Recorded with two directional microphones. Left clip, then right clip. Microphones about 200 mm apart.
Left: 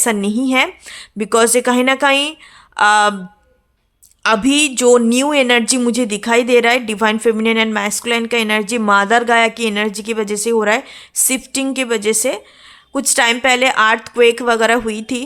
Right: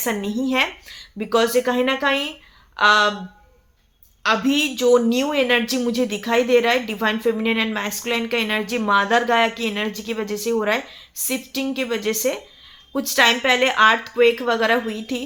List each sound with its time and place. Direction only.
0.0 s speech: 40° left (ahead or behind)
4.2 s speech: 45° left (ahead or behind)